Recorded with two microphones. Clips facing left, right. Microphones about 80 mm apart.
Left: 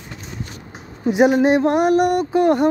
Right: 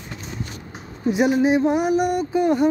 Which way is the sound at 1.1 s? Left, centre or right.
Left.